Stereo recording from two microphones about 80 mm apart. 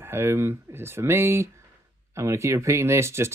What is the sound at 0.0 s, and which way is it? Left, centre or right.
Speech, right.